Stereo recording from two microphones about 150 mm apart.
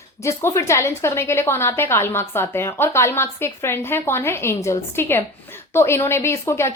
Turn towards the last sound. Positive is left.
turn(degrees=20)  # may be behind; listen again after turning